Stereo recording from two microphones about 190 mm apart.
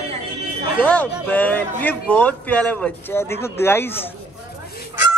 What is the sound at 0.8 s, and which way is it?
Speech, 5° left (ahead or behind).